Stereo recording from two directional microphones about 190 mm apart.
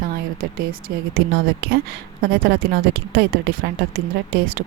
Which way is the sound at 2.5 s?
60° right (ahead or behind).